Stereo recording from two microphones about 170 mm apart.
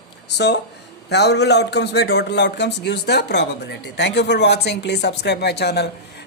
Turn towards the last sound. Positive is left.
turn(degrees=75)  # may be behind; listen again after turning